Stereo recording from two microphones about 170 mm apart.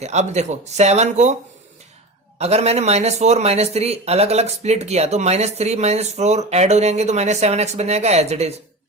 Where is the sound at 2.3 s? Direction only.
40° right (ahead or behind).